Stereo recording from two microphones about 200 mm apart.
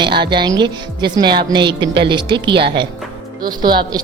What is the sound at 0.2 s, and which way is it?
A woman's voice, 25° right (ahead or behind).